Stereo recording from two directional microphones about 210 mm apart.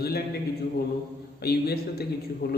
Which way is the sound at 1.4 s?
50° left (ahead or behind).